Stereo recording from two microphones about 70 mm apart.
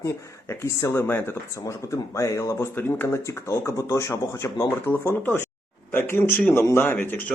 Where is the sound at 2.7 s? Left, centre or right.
Left.